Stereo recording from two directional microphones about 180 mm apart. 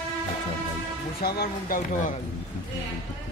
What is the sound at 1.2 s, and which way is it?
Speech, 60° left (ahead or behind).